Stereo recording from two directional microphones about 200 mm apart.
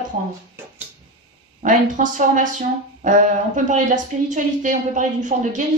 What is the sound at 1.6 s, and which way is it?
Speech, 40° right (ahead or behind).